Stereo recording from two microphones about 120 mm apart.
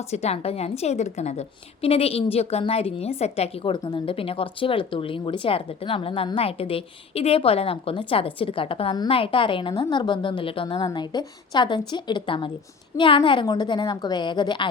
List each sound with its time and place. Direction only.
0.1 s a woman's voice: 60° left (ahead or behind); by 14.7 s 40° left (ahead or behind)